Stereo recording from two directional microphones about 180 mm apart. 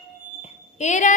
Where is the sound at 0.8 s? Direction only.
40° left (ahead or behind).